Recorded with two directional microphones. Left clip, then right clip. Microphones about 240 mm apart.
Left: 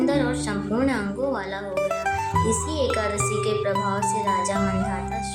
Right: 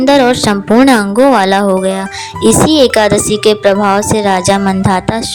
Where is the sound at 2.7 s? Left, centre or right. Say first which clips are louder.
Right 16 dB; right.